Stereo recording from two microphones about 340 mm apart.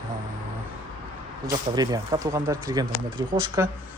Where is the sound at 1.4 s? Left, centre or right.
Centre.